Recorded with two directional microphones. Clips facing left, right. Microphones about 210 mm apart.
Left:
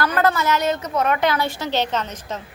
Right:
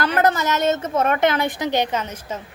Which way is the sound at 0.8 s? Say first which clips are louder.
Right 1 dB; 50° right (ahead or behind).